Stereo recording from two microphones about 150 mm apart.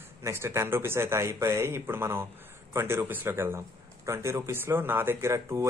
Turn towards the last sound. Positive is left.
turn(degrees=-20)  # may be behind; listen again after turning